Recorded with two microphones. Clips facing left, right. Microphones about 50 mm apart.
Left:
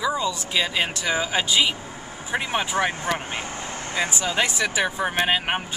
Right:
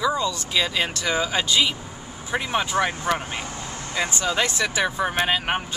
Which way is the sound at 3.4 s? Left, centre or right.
Left.